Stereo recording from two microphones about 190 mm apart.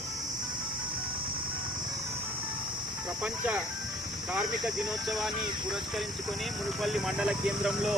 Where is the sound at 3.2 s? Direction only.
5° right (ahead or behind).